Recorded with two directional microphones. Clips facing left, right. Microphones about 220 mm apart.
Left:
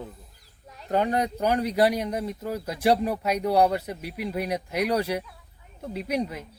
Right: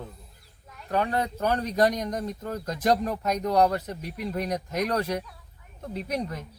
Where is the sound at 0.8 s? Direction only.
20° left (ahead or behind).